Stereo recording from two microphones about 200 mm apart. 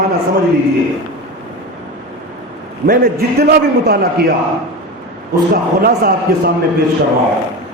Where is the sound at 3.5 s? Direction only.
50° right (ahead or behind).